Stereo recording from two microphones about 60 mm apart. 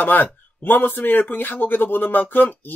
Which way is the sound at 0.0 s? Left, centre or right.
Left.